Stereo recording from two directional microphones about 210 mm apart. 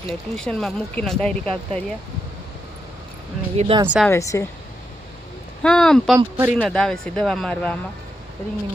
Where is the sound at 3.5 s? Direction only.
30° right (ahead or behind).